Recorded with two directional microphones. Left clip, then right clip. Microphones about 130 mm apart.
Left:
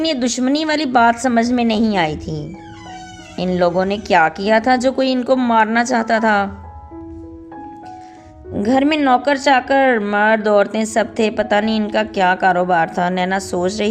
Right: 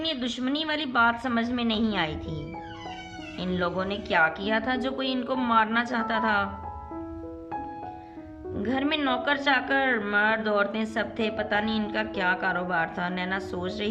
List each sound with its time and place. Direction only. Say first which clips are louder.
0.0 s a woman's voice: left 11 dB; 50° left (ahead or behind)
8.5 s a woman's voice: left 12 dB; 45° left (ahead or behind)